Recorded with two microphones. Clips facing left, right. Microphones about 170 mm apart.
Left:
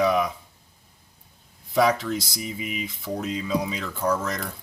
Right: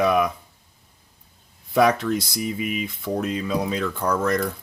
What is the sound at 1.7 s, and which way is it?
Speech, 60° right (ahead or behind).